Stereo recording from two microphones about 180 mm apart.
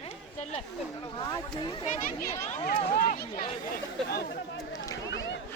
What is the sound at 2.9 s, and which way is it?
Speech, 50° left (ahead or behind).